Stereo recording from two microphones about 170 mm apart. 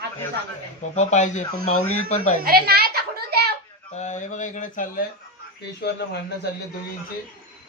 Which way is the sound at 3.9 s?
45° left (ahead or behind).